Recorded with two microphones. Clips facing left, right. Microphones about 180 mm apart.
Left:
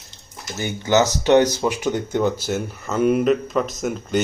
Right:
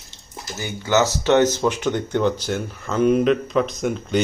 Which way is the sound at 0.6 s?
15° left (ahead or behind).